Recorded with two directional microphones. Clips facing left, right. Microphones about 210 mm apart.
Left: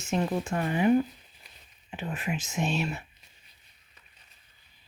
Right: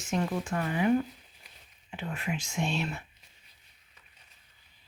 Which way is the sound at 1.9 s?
20° left (ahead or behind).